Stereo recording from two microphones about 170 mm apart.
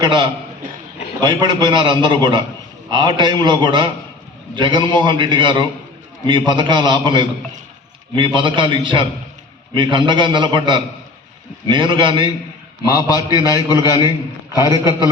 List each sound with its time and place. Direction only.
0.0 s a man's voice: 25° right (ahead or behind)
12.8 s a man's voice: 20° left (ahead or behind)
13.7 s a man's voice: 15° right (ahead or behind)
14.5 s a man's voice: 20° left (ahead or behind)